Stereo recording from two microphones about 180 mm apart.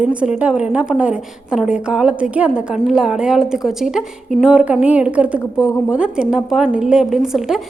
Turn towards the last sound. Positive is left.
turn(degrees=0)  # may be behind; listen again after turning